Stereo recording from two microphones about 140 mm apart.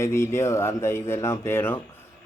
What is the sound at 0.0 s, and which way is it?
A man's voice, 20° left (ahead or behind).